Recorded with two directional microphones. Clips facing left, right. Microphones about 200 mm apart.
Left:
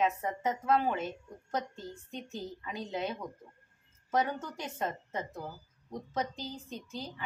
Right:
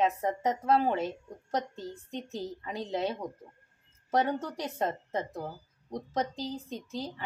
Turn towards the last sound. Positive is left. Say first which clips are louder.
# right 4 dB
turn(degrees=-35)  # may be behind; listen again after turning